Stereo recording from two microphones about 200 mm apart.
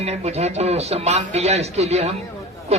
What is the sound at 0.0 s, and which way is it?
A man's voice, 30° right (ahead or behind).